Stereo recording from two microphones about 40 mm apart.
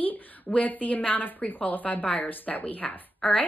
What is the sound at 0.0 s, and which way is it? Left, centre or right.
A woman's voice, left.